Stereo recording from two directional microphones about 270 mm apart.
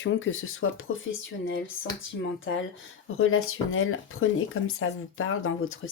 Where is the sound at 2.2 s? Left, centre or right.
Left.